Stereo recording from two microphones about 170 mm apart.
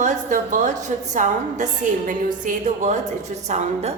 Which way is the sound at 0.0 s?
45° right (ahead or behind).